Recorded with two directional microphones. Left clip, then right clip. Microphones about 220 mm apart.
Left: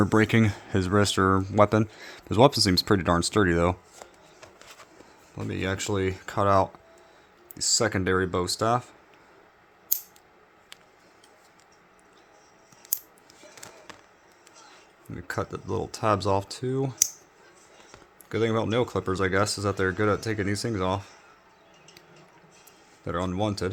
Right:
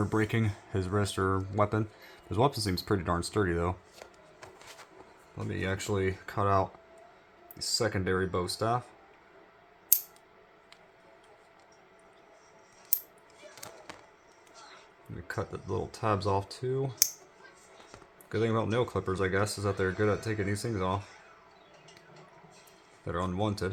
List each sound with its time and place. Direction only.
0.0 s speech: 40° left (ahead or behind)
5.3 s speech: 35° left (ahead or behind)
15.3 s speech: 40° left (ahead or behind)
18.3 s speech: 30° left (ahead or behind)
23.0 s speech: 30° left (ahead or behind)